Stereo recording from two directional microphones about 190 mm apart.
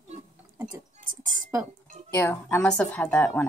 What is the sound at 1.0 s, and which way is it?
Music, 45° right (ahead or behind).